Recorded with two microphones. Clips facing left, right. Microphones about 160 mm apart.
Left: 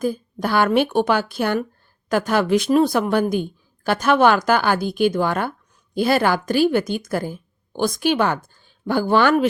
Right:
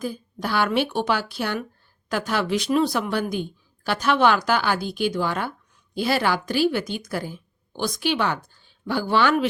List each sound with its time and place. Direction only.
0.0 s speech: 50° left (ahead or behind)